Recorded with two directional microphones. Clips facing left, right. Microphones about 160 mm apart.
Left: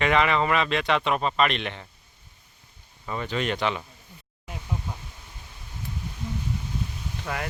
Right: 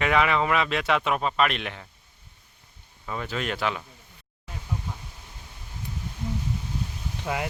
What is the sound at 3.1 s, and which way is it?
Speech, centre (ahead or behind).